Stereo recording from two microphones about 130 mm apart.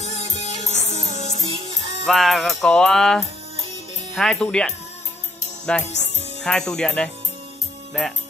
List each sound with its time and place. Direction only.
0.0 s music: 50° right (ahead or behind)
2.0 s music: centre (ahead or behind)
5.7 s speech: 10° left (ahead or behind)
6.4 s music: 5° left (ahead or behind)